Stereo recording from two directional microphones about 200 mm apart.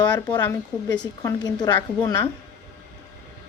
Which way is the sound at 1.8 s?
10° left (ahead or behind).